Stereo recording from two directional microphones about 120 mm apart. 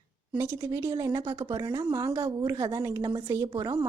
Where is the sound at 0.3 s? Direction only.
20° right (ahead or behind).